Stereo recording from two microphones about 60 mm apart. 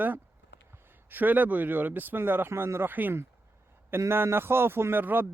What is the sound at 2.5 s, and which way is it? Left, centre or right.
Speech, right.